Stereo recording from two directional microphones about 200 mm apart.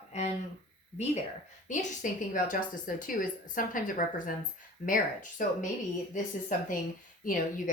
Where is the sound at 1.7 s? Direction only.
40° left (ahead or behind).